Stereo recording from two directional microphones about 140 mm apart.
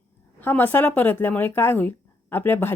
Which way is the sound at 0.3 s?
10° left (ahead or behind).